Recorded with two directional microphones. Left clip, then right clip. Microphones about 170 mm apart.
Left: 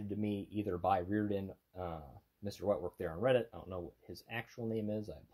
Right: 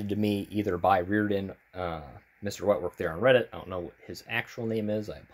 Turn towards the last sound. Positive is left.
turn(degrees=-10)  # may be behind; listen again after turning